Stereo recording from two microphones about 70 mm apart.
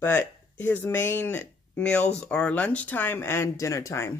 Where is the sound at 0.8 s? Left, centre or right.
Left.